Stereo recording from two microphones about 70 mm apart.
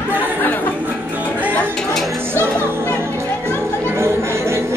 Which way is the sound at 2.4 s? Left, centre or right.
Right.